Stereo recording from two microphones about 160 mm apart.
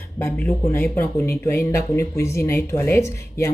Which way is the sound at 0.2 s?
10° left (ahead or behind).